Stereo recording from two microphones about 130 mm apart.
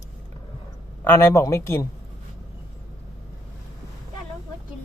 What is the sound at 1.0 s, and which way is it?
Speech, 15° left (ahead or behind).